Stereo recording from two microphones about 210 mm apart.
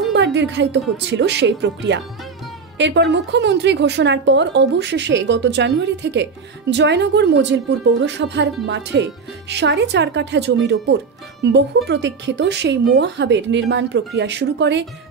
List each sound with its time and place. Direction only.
0.1 s speech: 55° right (ahead or behind)